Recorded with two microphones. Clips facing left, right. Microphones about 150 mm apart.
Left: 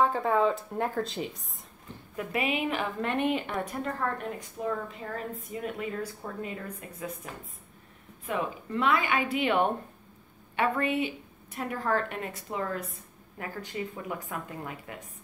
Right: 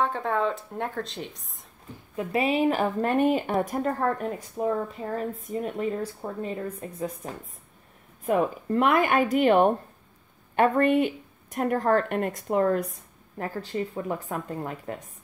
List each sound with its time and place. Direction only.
0.0 s speech: centre (ahead or behind)
2.1 s speech: 30° right (ahead or behind)
4.6 s speech: 30° right (ahead or behind)
5.1 s speech: 40° right (ahead or behind)
6.2 s speech: 25° right (ahead or behind)
8.3 s a woman's voice: 50° right (ahead or behind)
13.4 s speech: 35° right (ahead or behind)